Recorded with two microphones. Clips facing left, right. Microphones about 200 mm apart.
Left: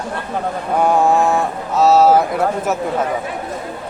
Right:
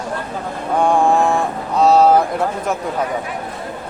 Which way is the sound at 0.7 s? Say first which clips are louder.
Even; 5° left (ahead or behind).